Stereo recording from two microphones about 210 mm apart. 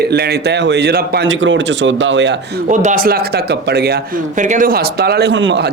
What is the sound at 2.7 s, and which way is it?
Speech, 40° right (ahead or behind).